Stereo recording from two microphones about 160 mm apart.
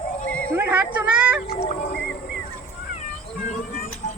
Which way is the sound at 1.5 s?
40° left (ahead or behind).